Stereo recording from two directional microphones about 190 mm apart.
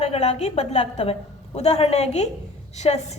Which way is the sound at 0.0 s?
35° left (ahead or behind).